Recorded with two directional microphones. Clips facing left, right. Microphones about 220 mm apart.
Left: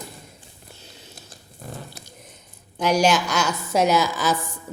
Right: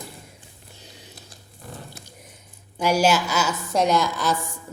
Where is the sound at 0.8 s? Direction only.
15° right (ahead or behind).